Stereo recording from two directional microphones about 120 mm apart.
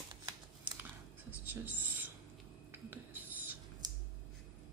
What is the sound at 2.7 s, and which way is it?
Whispering, 15° right (ahead or behind).